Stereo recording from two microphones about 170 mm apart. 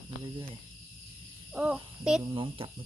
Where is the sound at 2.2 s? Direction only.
30° right (ahead or behind).